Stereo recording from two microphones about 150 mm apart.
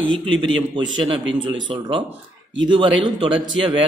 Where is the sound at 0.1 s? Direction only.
35° right (ahead or behind).